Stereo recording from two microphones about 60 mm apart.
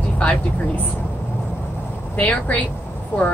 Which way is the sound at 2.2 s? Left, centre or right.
Left.